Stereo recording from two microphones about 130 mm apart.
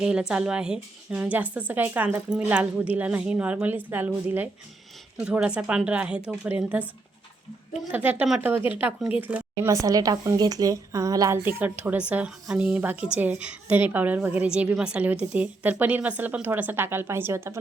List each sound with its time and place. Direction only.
0.0 s a woman's voice: 5° right (ahead or behind)
7.9 s a woman's voice: 10° right (ahead or behind)
9.6 s speech: 25° right (ahead or behind)
11.4 s a woman's voice: 15° right (ahead or behind)